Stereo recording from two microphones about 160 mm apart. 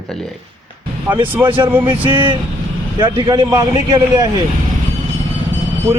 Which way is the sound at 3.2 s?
25° right (ahead or behind).